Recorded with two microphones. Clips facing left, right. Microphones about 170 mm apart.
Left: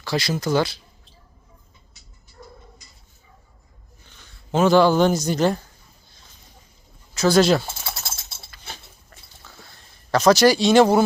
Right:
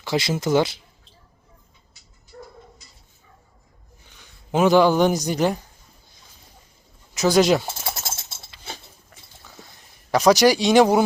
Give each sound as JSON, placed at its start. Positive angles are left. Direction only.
{"t": 0.0, "sound": "speech", "side_deg": -20}
{"t": 4.1, "sound": "speech", "side_deg": -15}
{"t": 7.1, "sound": "speech", "side_deg": -15}
{"t": 9.7, "sound": "speech", "side_deg": -15}